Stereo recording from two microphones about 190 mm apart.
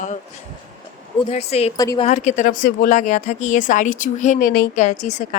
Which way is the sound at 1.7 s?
20° left (ahead or behind).